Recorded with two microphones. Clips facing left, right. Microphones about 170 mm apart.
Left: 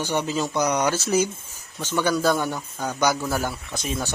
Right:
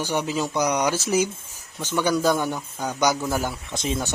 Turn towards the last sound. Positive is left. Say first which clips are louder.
# right 2 dB
turn(degrees=-25)  # may be behind; listen again after turning